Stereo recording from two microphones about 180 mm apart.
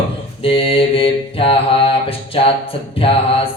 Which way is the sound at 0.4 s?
30° left (ahead or behind).